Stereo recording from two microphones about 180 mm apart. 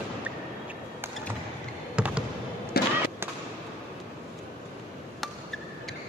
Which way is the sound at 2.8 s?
60° left (ahead or behind).